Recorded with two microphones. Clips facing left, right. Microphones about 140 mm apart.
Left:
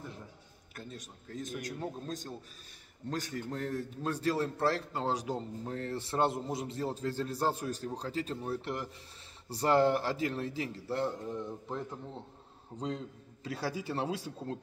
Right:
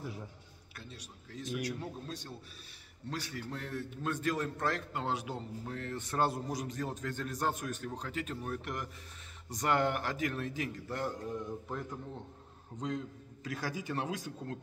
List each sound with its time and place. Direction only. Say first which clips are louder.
0.7 s a man's voice: left 5 dB; 45° left (ahead or behind); by 14.6 s 30° left (ahead or behind)